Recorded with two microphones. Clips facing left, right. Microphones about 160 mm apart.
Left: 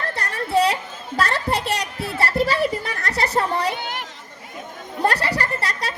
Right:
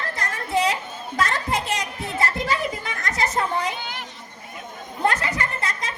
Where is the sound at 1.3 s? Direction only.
65° left (ahead or behind).